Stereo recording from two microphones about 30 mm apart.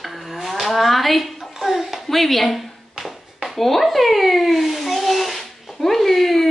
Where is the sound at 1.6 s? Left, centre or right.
Centre.